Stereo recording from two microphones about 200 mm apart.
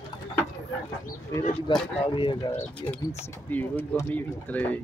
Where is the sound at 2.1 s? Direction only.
25° left (ahead or behind).